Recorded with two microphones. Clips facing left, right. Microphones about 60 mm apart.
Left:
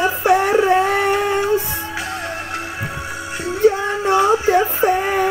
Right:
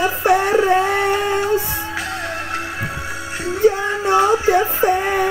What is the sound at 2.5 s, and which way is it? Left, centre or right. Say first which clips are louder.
Music: right 1 dB; right.